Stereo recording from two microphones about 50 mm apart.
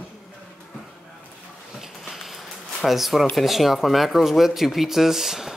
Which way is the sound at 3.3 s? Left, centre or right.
Centre.